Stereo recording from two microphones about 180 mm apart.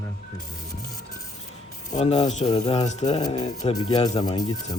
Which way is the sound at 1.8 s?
40° left (ahead or behind).